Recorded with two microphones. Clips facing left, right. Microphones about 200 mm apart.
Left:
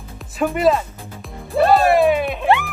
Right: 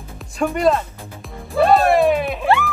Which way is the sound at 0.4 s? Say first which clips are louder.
Left 1 dB; centre (ahead or behind).